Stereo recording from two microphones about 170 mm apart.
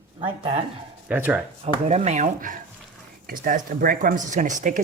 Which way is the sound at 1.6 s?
40° right (ahead or behind).